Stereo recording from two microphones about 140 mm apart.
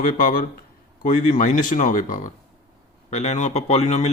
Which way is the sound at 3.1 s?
60° left (ahead or behind).